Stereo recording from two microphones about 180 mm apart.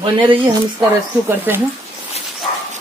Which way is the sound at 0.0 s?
30° right (ahead or behind).